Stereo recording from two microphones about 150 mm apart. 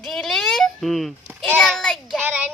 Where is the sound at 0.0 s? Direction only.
Centre (ahead or behind).